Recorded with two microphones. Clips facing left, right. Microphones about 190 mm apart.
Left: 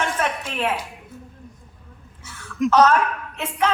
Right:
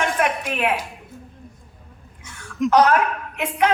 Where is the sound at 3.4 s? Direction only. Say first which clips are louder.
Right 3 dB; 15° right (ahead or behind).